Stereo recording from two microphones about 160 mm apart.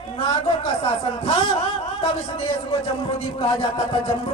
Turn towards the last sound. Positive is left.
turn(degrees=35)  # may be behind; listen again after turning